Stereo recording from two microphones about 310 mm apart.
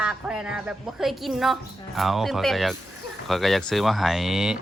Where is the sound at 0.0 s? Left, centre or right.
Centre.